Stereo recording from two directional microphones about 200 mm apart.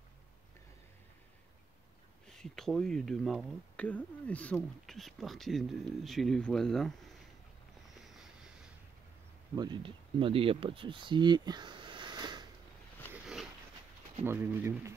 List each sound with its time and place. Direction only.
2.2 s speech: centre (ahead or behind)
9.6 s speech: 25° right (ahead or behind)
13.1 s a sound: 5° right (ahead or behind)
14.2 s speech: 10° right (ahead or behind)